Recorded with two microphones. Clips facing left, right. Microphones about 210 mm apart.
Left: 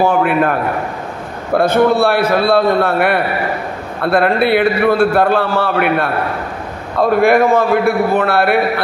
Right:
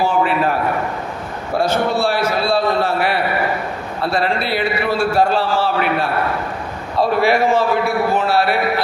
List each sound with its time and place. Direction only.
0.0 s a man's voice: 55° left (ahead or behind)
1.6 s a man's voice: 55° left (ahead or behind)